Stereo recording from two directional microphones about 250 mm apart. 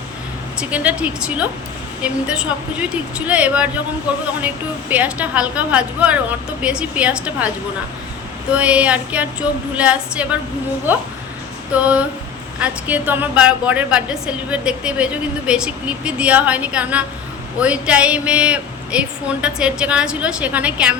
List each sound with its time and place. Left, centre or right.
0.6 s a woman's voice: centre
8.5 s a woman's voice: centre